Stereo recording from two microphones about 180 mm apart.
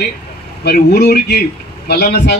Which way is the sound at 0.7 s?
65° left (ahead or behind).